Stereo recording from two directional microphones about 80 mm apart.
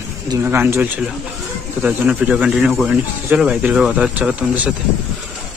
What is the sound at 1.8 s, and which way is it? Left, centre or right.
Speech, centre.